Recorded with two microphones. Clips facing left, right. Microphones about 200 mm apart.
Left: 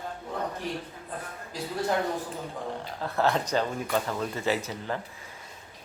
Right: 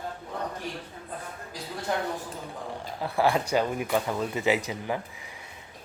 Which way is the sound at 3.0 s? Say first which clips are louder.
Right 2 dB; 10° right (ahead or behind).